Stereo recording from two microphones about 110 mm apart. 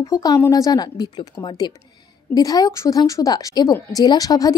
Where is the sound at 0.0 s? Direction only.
35° left (ahead or behind).